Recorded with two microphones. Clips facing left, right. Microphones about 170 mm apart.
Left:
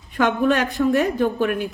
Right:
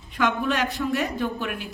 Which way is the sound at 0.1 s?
50° left (ahead or behind).